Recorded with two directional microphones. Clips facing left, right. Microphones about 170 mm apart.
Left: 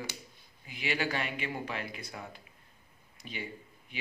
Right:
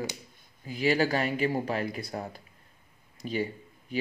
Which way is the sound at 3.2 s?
40° right (ahead or behind).